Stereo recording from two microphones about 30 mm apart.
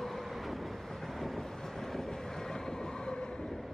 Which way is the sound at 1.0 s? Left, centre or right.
Centre.